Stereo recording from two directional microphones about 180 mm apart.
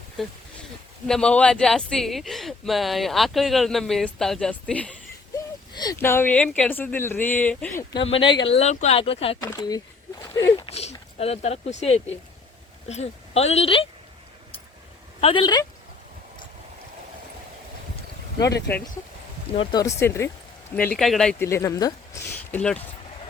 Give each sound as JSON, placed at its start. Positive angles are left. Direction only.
{"t": 1.0, "sound": "speech", "side_deg": 5}
{"t": 5.7, "sound": "speech", "side_deg": 20}
{"t": 7.9, "sound": "a woman's voice", "side_deg": 30}
{"t": 9.4, "sound": "speech", "side_deg": 20}
{"t": 10.7, "sound": "a sound", "side_deg": 35}
{"t": 11.2, "sound": "a woman's voice", "side_deg": 35}
{"t": 15.2, "sound": "speech", "side_deg": 30}
{"t": 19.5, "sound": "speech", "side_deg": 20}
{"t": 22.5, "sound": "speech", "side_deg": 5}